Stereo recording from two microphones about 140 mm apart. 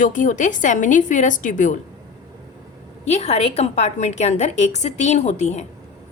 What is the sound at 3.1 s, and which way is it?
A woman's voice, 50° left (ahead or behind).